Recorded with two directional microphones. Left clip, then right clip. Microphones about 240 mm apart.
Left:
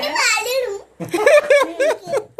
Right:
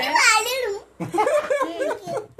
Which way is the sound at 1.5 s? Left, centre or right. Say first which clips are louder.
Left 8 dB; left.